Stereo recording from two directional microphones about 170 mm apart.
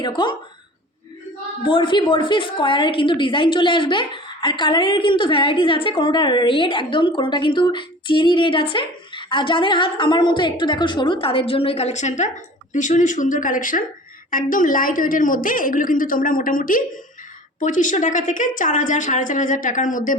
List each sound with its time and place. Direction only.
0.0 s a woman's voice: 25° left (ahead or behind)
1.6 s a woman's voice: 30° left (ahead or behind); by 20.1 s 50° left (ahead or behind)